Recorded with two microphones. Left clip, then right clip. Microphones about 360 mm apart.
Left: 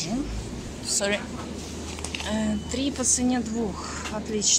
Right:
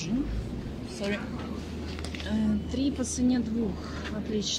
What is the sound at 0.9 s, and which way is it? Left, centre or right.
Speech, left.